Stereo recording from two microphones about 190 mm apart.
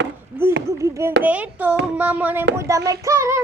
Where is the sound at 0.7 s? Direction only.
15° right (ahead or behind).